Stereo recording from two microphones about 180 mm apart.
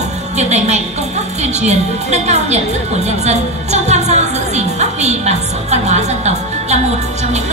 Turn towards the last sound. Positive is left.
turn(degrees=-40)  # may be behind; listen again after turning